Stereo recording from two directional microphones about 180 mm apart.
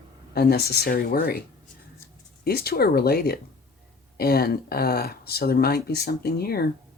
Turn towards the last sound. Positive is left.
turn(degrees=55)  # may be behind; listen again after turning